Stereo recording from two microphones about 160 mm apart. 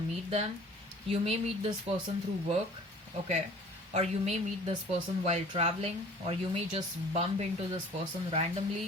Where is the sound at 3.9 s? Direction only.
40° right (ahead or behind).